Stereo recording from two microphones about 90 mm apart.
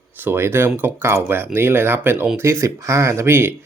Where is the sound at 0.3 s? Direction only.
25° right (ahead or behind).